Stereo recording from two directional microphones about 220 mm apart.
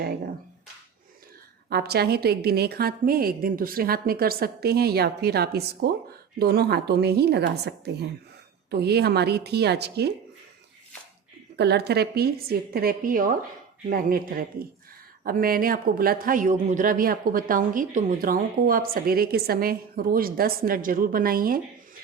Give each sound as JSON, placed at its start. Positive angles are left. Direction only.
{"t": 1.7, "sound": "a woman's voice", "side_deg": -45}
{"t": 8.7, "sound": "a woman's voice", "side_deg": -45}
{"t": 11.5, "sound": "a woman's voice", "side_deg": -50}